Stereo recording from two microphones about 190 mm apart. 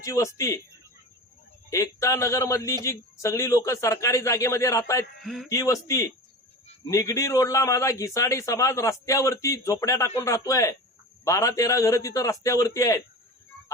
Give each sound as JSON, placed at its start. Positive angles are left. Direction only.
{"t": 0.0, "sound": "a man's voice", "side_deg": 15}
{"t": 1.7, "sound": "a man's voice", "side_deg": 15}
{"t": 5.2, "sound": "speech", "side_deg": 0}
{"t": 5.5, "sound": "a man's voice", "side_deg": 15}